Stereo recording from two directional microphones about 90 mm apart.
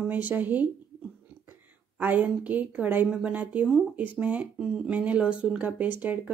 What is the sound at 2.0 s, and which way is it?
A woman's voice, 20° right (ahead or behind).